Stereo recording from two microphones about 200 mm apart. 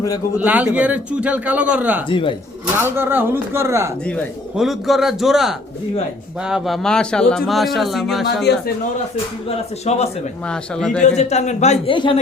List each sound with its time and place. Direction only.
0.3 s a man's voice: 10° right (ahead or behind)
2.0 s a woman's voice: 25° left (ahead or behind)
2.7 s a man's voice: 10° right (ahead or behind)
4.0 s a man's voice: centre (ahead or behind)
9.9 s speech: 35° left (ahead or behind)
10.4 s a man's voice: 5° left (ahead or behind)
11.2 s a woman's voice: 35° left (ahead or behind)